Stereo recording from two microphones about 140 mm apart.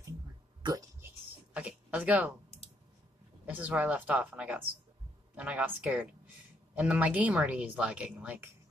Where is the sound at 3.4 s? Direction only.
10° right (ahead or behind).